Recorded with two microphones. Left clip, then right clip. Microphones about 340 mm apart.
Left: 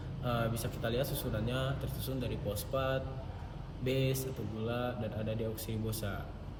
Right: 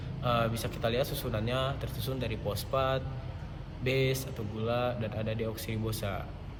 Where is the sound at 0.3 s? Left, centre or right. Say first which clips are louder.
Right 6 dB; centre.